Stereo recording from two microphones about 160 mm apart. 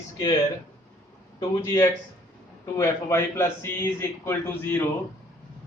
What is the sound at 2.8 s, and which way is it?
A man's voice, 15° left (ahead or behind).